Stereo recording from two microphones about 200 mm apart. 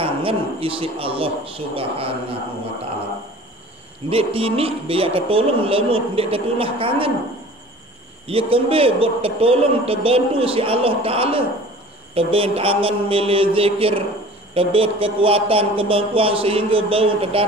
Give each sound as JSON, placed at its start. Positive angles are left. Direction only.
{"t": 0.0, "sound": "a man's voice", "side_deg": -30}
{"t": 4.1, "sound": "a man's voice", "side_deg": -30}
{"t": 8.3, "sound": "a man's voice", "side_deg": -25}